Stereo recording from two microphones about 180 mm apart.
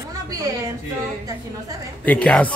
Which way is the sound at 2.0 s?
5° left (ahead or behind).